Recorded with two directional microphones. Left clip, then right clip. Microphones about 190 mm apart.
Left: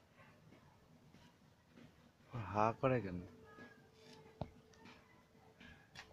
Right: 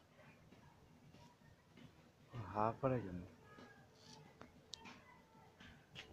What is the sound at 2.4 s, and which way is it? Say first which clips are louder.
Speech: left 3 dB; 20° left (ahead or behind).